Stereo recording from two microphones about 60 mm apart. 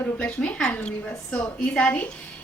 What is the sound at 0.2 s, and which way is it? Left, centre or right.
A woman's voice, left.